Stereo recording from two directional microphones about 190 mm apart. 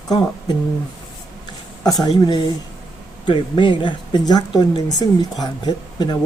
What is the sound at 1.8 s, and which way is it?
Speech, 20° left (ahead or behind).